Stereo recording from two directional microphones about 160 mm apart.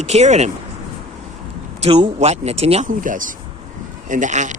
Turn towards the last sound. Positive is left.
turn(degrees=-50)  # may be behind; listen again after turning